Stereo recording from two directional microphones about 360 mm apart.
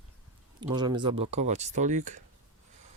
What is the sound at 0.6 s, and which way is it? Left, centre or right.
Speech, centre.